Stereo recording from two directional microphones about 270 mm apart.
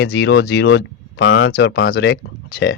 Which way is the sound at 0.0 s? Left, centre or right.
Left.